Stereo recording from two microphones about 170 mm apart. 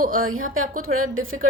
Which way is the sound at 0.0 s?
55° right (ahead or behind).